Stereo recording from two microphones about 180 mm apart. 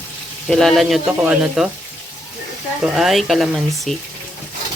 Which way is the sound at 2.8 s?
Centre (ahead or behind).